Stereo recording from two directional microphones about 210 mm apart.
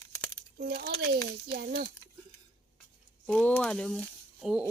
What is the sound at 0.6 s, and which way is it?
Speech, 50° right (ahead or behind).